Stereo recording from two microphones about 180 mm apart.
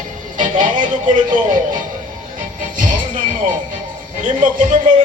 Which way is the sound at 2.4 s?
45° right (ahead or behind).